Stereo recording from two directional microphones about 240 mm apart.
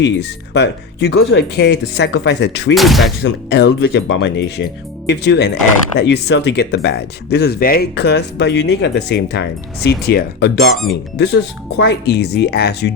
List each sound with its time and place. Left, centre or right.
0.0 s speech: left
2.7 s speech: centre
3.2 s speech: left
10.7 s speech: centre
11.8 s speech: left